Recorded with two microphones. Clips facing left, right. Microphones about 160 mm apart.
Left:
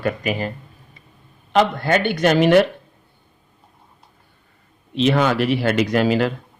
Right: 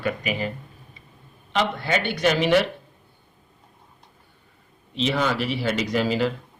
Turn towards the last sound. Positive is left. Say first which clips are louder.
# left 5 dB
turn(degrees=60)  # may be behind; listen again after turning